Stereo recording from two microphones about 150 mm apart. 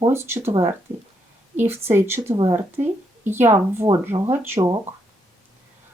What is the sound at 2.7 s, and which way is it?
Speech, 15° right (ahead or behind).